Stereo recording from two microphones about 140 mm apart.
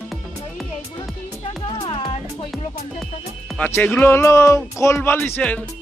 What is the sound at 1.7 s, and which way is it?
Music, 40° left (ahead or behind).